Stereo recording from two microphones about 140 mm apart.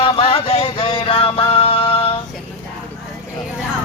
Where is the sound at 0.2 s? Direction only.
40° left (ahead or behind).